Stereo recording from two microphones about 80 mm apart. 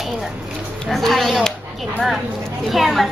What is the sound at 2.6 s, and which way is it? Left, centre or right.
Speech, centre.